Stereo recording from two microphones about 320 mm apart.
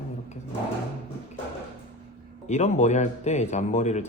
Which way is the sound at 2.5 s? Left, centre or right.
Left.